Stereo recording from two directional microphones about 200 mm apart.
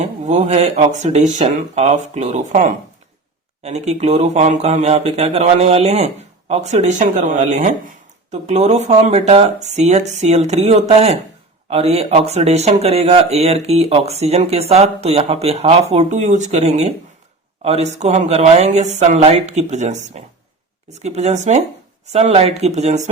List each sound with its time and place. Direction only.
0.0 s speech: 35° right (ahead or behind)